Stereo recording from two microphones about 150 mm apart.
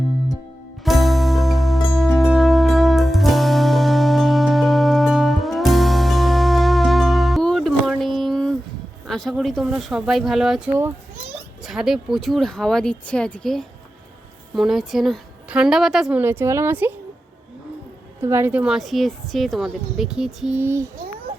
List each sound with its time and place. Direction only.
0.9 s music: centre (ahead or behind)
9.0 s speech: 5° left (ahead or behind)
11.6 s a woman's voice: 5° right (ahead or behind)
18.2 s a woman's voice: 15° right (ahead or behind)